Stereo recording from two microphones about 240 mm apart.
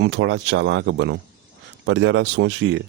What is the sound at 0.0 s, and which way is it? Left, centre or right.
Speech, right.